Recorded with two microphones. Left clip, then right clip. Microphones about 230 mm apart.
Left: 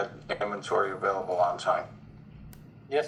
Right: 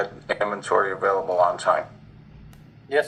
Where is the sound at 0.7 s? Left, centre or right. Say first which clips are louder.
Right 6 dB; right.